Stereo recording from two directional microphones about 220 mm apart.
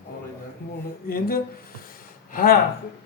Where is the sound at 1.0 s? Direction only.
45° left (ahead or behind).